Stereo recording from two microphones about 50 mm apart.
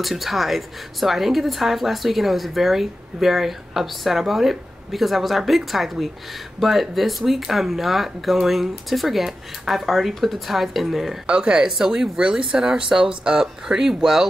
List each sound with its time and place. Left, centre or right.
0.0 s a woman's voice: centre
11.2 s speech: centre